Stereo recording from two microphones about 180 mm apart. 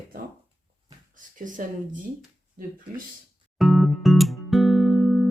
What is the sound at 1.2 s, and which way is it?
Speech, 45° right (ahead or behind).